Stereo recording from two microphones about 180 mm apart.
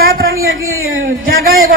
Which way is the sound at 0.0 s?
55° right (ahead or behind).